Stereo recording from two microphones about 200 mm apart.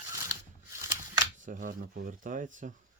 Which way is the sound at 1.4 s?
40° right (ahead or behind).